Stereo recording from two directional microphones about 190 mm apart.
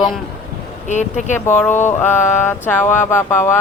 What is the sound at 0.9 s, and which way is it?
Speech, 40° left (ahead or behind).